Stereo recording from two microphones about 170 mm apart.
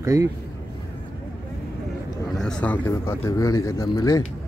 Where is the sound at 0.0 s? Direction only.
20° right (ahead or behind).